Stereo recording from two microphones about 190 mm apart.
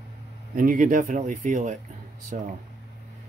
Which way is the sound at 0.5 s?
45° right (ahead or behind).